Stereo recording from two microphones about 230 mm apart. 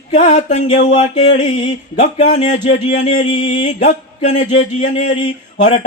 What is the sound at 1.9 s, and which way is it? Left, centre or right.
Mantra, left.